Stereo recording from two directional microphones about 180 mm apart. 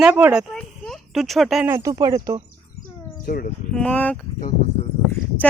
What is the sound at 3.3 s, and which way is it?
Speech, 55° left (ahead or behind).